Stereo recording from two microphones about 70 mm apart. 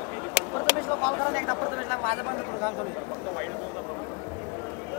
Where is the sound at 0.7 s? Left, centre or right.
Left.